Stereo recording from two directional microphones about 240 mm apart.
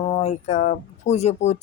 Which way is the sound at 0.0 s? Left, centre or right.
Left.